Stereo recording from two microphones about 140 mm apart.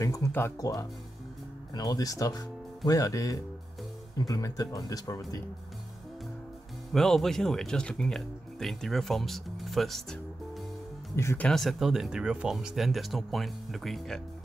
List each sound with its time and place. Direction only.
0.0 s speech: 25° left (ahead or behind)
1.7 s speech: 25° left (ahead or behind)
6.9 s speech: centre (ahead or behind)
11.1 s speech: 20° left (ahead or behind)
11.4 s speech: centre (ahead or behind)